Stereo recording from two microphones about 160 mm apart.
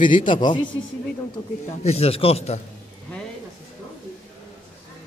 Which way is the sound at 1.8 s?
40° left (ahead or behind).